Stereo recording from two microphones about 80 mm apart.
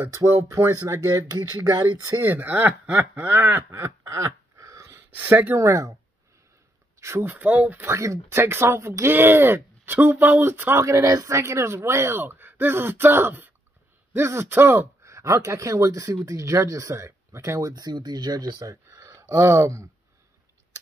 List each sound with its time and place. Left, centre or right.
0.0 s speech: right
2.1 s speech: right
5.1 s speech: right
5.6 s speech: right
7.0 s speech: right
7.9 s speech: right
10.9 s speech: right
17.6 s speech: right